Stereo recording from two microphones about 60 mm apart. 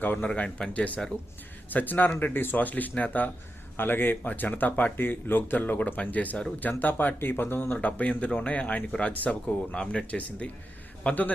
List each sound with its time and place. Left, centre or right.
0.2 s speech: centre